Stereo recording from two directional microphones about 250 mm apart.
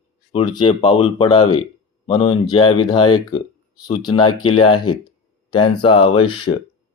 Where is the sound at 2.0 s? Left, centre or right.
Centre.